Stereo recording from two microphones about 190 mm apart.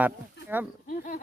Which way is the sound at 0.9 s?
45° left (ahead or behind).